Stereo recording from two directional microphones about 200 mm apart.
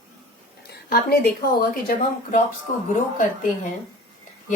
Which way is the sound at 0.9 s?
45° left (ahead or behind).